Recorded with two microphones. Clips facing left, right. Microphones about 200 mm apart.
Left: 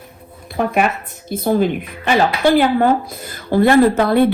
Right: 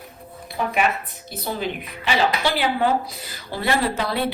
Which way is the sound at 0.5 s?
50° left (ahead or behind).